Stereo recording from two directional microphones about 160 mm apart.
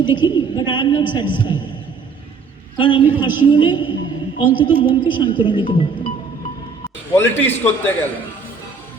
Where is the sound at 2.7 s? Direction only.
30° left (ahead or behind).